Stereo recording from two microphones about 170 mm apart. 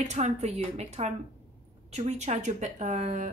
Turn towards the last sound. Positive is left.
turn(degrees=-45)  # may be behind; listen again after turning